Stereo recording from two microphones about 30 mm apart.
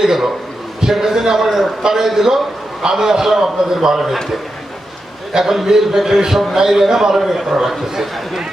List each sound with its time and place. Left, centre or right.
0.0 s a man's voice: centre
5.3 s a man's voice: centre